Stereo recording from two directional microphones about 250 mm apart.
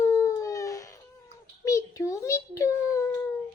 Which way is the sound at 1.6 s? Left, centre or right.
Centre.